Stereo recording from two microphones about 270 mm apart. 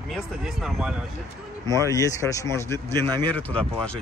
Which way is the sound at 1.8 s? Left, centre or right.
Centre.